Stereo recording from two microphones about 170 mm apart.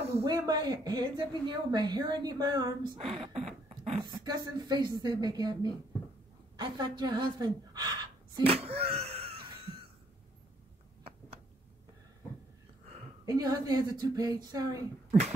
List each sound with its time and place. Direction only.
0.2 s a woman's voice: 20° right (ahead or behind)
8.5 s a sound: 35° right (ahead or behind)
13.2 s speech: 20° right (ahead or behind)